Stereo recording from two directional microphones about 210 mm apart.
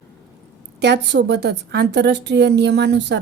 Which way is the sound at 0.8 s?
55° right (ahead or behind).